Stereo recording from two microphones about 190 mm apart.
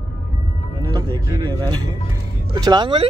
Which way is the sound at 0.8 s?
20° right (ahead or behind).